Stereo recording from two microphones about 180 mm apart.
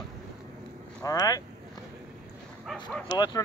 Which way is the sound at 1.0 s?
20° left (ahead or behind).